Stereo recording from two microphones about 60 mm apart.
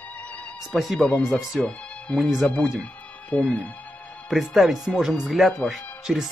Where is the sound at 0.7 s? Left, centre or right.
Centre.